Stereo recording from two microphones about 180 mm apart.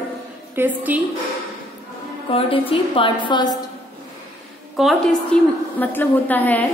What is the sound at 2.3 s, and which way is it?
A woman's voice, 30° left (ahead or behind).